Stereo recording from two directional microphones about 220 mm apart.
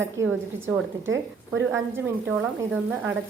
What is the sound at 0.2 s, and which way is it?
A woman's voice, 60° right (ahead or behind).